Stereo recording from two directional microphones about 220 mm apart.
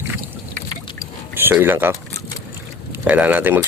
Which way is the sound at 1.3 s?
10° right (ahead or behind).